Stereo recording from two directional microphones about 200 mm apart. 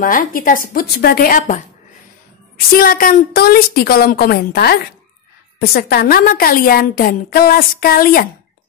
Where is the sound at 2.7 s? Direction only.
45° left (ahead or behind).